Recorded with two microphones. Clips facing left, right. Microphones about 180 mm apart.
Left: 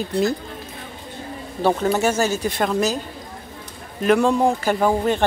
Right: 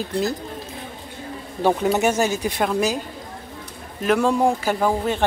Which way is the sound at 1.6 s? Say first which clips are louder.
Even; 15° right (ahead or behind).